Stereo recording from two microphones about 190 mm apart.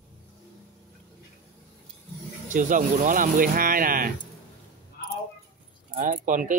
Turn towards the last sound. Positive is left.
turn(degrees=-45)  # may be behind; listen again after turning